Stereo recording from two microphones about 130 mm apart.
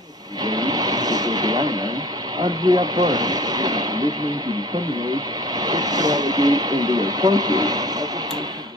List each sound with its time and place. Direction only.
0.4 s music: 30° right (ahead or behind)
2.4 s speech: 30° right (ahead or behind)
5.6 s speech: 30° right (ahead or behind)